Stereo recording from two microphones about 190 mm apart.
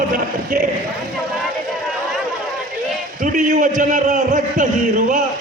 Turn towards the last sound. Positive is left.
turn(degrees=-40)  # may be behind; listen again after turning